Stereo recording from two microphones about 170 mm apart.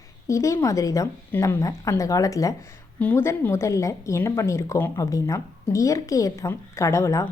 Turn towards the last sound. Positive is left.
turn(degrees=20)  # may be behind; listen again after turning